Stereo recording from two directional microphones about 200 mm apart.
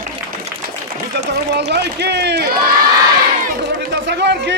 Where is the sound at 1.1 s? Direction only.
55° right (ahead or behind).